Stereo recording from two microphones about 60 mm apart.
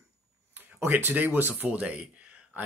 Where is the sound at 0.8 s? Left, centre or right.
Right.